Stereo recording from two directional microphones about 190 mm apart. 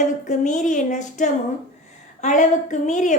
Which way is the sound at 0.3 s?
40° left (ahead or behind).